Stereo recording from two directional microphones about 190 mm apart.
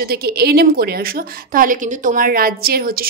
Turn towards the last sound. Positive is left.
turn(degrees=-50)  # may be behind; listen again after turning